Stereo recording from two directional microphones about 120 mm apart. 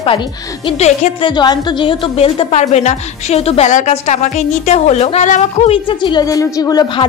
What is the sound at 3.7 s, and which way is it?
A woman's voice, 80° left.